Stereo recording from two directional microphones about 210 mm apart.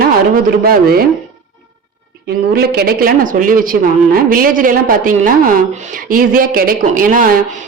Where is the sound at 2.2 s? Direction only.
50° right (ahead or behind).